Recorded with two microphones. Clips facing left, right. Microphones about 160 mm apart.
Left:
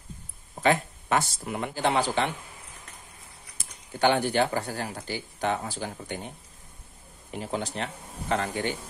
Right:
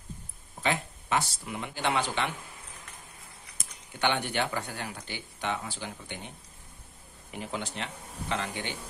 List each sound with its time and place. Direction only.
0.6 s speech: 50° left (ahead or behind)
3.5 s speech: 35° left (ahead or behind)